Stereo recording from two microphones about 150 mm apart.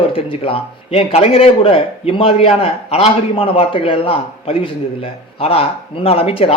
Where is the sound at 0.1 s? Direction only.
40° left (ahead or behind).